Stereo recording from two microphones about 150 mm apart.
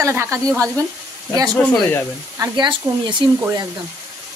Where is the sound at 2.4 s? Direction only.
30° right (ahead or behind).